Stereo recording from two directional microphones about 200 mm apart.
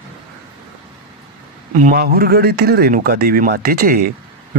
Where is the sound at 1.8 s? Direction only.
45° right (ahead or behind).